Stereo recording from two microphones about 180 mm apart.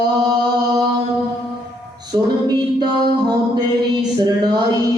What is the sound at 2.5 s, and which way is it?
Music, 25° right (ahead or behind).